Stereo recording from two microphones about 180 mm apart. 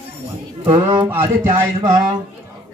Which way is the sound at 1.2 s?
25° right (ahead or behind).